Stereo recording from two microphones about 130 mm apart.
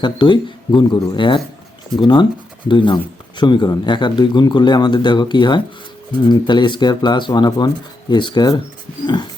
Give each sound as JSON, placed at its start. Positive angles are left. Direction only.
{"t": 0.0, "sound": "speech", "side_deg": 35}